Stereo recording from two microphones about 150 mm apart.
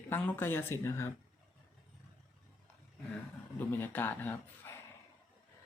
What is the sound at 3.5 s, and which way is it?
Speech, 15° left (ahead or behind).